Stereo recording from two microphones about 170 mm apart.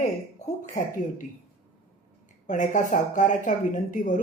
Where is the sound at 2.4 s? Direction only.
50° left (ahead or behind).